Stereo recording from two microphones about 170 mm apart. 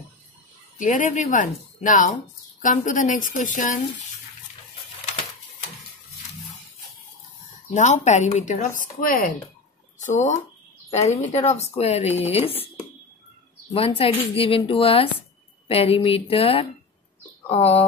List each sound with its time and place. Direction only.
0.7 s speech: 50° left (ahead or behind)
7.7 s speech: 45° left (ahead or behind)